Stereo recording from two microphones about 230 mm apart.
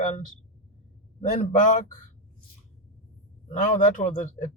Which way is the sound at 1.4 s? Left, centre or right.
Left.